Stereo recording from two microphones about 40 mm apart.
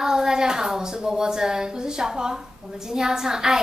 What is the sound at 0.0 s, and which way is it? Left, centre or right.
Child singing, centre.